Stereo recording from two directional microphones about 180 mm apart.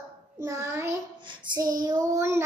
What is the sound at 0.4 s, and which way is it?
Speech, 15° right (ahead or behind).